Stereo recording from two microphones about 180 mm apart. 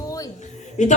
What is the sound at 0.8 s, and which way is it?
Speech, 40° left (ahead or behind).